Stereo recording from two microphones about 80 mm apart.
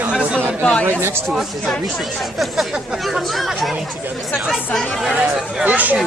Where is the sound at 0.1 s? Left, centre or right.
Centre.